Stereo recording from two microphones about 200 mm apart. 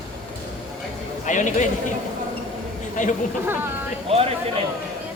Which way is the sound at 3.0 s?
40° left (ahead or behind).